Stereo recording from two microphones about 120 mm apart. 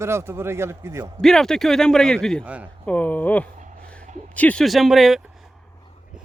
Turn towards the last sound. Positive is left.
turn(degrees=0)  # may be behind; listen again after turning